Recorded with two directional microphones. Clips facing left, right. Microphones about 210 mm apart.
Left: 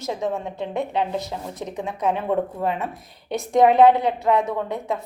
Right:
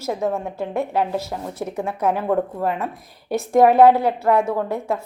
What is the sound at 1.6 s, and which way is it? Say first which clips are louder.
Speech: right 5 dB; 20° left (ahead or behind).